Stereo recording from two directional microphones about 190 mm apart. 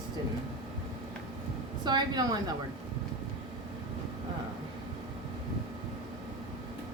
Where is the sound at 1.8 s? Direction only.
20° right (ahead or behind).